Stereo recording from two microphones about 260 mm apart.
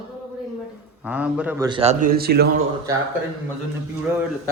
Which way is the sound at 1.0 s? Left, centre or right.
Centre.